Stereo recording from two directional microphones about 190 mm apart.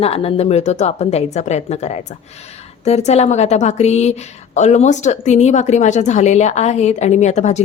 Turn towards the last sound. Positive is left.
turn(degrees=35)  # may be behind; listen again after turning